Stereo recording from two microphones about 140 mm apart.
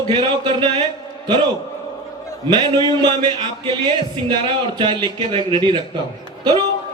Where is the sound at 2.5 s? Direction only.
35° right (ahead or behind).